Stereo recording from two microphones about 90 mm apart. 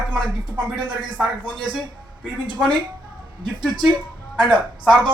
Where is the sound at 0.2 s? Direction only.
55° right (ahead or behind).